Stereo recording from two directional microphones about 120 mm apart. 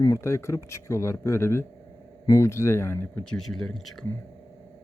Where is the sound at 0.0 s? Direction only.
25° left (ahead or behind).